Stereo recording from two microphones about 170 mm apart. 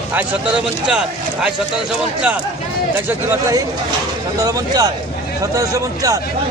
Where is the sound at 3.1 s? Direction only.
15° right (ahead or behind).